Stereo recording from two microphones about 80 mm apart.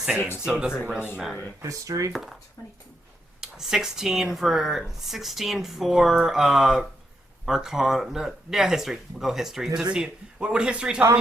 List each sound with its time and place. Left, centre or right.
0.2 s speech: left
0.4 s a man's voice: centre
1.6 s speech: right
2.1 s speech: centre
3.4 s a man's voice: centre